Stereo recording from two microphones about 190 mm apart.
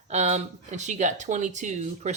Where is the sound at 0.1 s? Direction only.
35° right (ahead or behind).